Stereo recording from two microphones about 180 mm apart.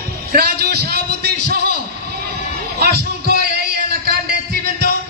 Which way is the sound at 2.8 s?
60° right (ahead or behind).